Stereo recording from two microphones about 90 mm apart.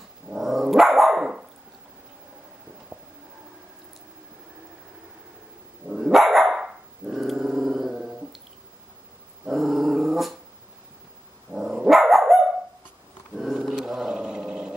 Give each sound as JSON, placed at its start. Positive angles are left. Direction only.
{"t": 0.3, "sound": "dog", "side_deg": -5}
{"t": 2.9, "sound": "a sound", "side_deg": -15}
{"t": 5.9, "sound": "dog", "side_deg": -5}
{"t": 9.5, "sound": "dog", "side_deg": -5}
{"t": 11.5, "sound": "dog", "side_deg": -5}
{"t": 13.4, "sound": "roar", "side_deg": -5}